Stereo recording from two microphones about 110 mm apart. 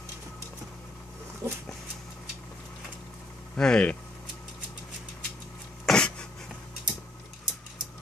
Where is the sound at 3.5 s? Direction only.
10° left (ahead or behind).